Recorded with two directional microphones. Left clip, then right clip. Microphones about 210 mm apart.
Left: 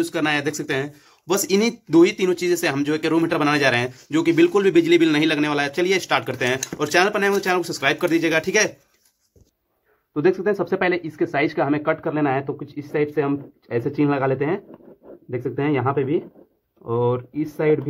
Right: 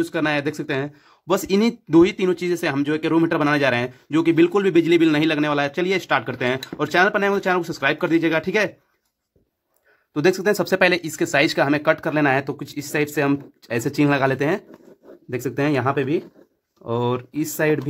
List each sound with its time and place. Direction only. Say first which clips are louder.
0.0 s speech: even; 35° right (ahead or behind)
10.1 s speech: right 1 dB; 50° right (ahead or behind)